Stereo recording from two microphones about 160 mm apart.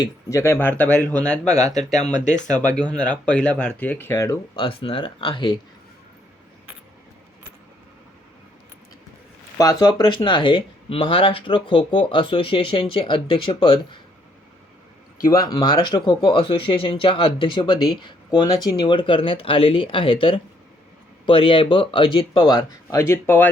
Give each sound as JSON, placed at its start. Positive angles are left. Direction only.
{"t": 0.0, "sound": "speech", "side_deg": 20}
{"t": 1.5, "sound": "speech", "side_deg": 45}
{"t": 2.5, "sound": "speech", "side_deg": 5}
{"t": 4.5, "sound": "speech", "side_deg": 35}
{"t": 9.6, "sound": "speech", "side_deg": 25}
{"t": 15.3, "sound": "speech", "side_deg": 20}